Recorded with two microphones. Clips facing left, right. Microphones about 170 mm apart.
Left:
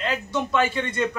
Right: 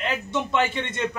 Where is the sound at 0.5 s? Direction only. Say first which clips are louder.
Left 2 dB; 20° right (ahead or behind).